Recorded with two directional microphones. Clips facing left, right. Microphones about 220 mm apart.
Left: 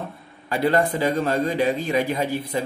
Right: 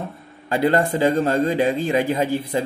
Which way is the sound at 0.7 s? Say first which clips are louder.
Right 2 dB; 25° right (ahead or behind).